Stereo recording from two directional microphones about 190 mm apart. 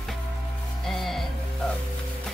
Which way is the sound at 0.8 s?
Centre (ahead or behind).